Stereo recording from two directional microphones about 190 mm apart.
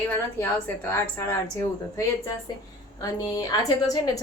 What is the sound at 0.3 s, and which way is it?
A woman's voice, 10° left (ahead or behind).